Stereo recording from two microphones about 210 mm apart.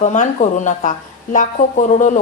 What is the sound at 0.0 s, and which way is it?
A woman's voice, 35° left (ahead or behind).